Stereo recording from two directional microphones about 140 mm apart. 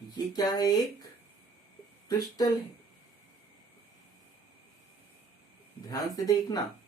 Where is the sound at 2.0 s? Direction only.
30° left (ahead or behind).